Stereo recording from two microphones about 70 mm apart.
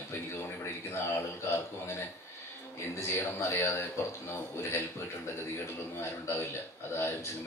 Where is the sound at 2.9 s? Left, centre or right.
Left.